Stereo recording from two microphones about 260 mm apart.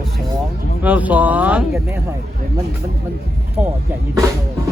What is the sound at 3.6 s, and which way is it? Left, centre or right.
Speech, centre.